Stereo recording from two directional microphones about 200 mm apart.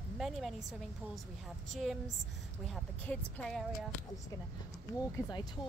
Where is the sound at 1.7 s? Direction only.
Centre (ahead or behind).